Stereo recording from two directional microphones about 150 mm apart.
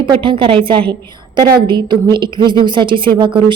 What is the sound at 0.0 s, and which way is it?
A woman's voice, 35° right (ahead or behind).